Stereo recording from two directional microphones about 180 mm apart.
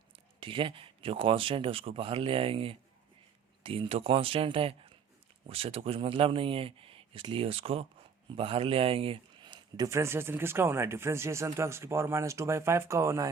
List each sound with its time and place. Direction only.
0.3 s speech: 30° right (ahead or behind)